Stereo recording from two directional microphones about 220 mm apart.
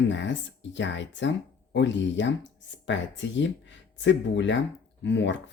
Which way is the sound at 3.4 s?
55° left (ahead or behind).